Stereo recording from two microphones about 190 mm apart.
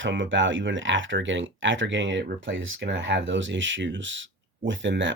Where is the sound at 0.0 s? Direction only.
80° right.